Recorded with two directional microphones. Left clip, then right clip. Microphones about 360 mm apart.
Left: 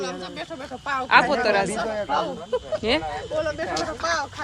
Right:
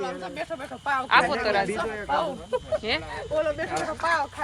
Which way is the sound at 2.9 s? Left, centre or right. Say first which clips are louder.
Left 7 dB; centre.